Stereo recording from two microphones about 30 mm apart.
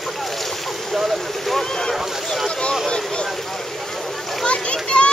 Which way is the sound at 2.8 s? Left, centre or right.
Left.